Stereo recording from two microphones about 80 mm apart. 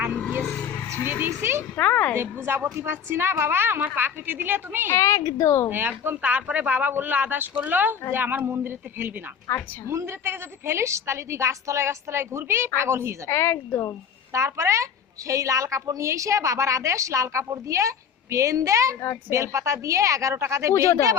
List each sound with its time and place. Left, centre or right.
1.2 s speech: right
1.7 s speech: centre
2.1 s speech: right
4.9 s a woman's voice: left
5.7 s speech: right
9.5 s a woman's voice: left
9.9 s a woman's voice: right
13.2 s a woman's voice: left
14.3 s a woman's voice: right